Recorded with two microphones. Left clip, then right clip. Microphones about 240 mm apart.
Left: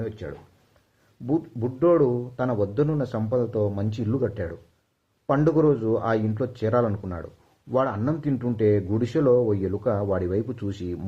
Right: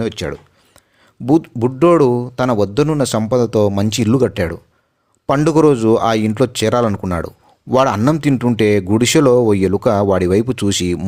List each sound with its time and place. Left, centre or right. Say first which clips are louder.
0.0 s speech: right 12 dB; right